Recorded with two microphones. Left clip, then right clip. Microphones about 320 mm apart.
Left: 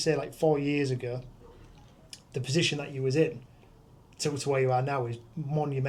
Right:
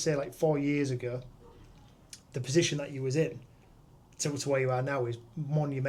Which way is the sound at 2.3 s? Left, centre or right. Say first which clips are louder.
Even; right.